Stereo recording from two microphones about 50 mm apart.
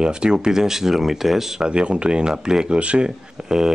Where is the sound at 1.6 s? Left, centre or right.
Centre.